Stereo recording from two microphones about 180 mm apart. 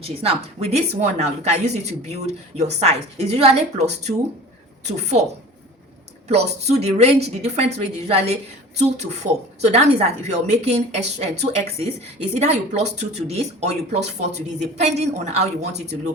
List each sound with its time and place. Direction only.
0.0 s speech: 35° right (ahead or behind)
6.2 s speech: 35° right (ahead or behind)
9.6 s speech: 35° right (ahead or behind)